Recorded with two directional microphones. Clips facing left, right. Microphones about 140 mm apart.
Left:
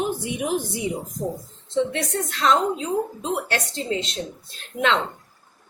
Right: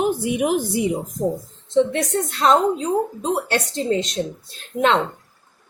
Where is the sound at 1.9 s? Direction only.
35° right (ahead or behind).